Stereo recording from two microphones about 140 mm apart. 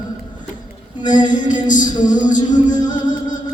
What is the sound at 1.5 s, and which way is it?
Music, 65° left (ahead or behind).